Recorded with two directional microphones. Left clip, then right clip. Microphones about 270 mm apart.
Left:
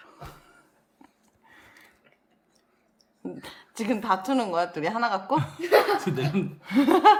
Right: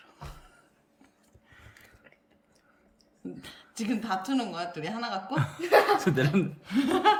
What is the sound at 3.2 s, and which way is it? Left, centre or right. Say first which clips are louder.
A woman's voice: left 4 dB; centre.